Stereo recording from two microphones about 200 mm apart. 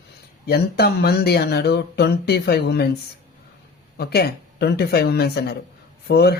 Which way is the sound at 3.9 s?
50° left (ahead or behind).